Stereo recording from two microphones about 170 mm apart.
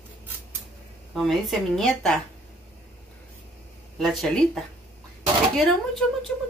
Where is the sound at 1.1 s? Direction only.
Centre (ahead or behind).